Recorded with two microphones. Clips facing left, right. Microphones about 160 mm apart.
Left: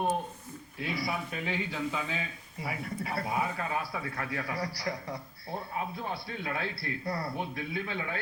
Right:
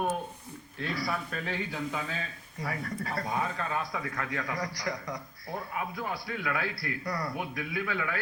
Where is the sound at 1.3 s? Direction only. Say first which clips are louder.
Even; 10° left (ahead or behind).